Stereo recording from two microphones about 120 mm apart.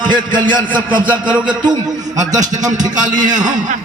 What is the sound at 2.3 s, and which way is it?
Speech, 90° right.